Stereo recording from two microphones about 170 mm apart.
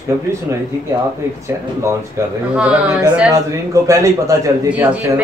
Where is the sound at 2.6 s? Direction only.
5° right (ahead or behind).